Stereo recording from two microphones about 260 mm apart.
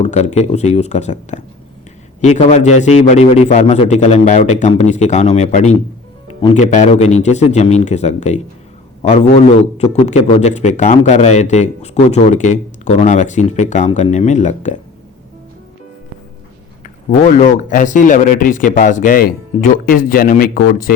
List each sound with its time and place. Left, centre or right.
0.0 s speech: left
9.0 s a sound: left
9.9 s speech: left
17.1 s speech: left